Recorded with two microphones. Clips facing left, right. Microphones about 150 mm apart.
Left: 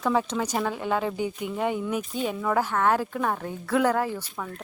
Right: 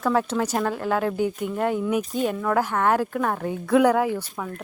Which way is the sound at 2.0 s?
45° right (ahead or behind).